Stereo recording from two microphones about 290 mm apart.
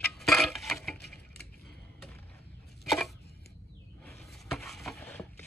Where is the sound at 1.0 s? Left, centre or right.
Left.